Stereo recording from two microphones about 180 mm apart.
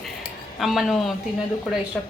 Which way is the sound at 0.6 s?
Centre (ahead or behind).